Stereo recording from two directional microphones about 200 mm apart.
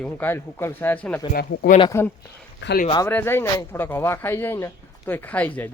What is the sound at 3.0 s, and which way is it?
Speech, 10° left (ahead or behind).